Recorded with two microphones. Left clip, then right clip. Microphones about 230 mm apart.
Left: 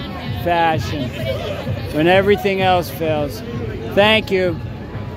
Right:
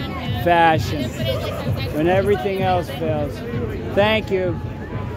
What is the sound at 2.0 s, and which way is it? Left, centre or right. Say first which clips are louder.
Speech: left 4 dB; centre.